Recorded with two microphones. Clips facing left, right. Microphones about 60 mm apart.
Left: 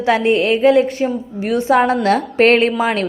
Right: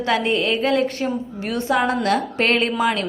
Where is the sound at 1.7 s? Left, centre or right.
Left.